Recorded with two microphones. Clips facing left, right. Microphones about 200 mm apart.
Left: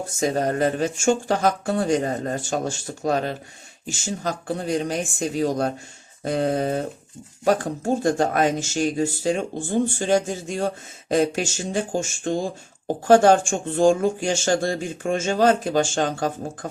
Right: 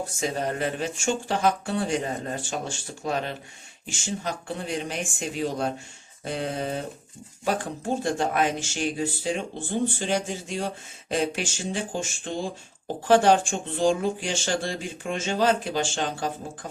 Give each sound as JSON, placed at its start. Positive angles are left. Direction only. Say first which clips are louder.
{"t": 0.2, "sound": "speech", "louder": "left 7 dB", "side_deg": 45}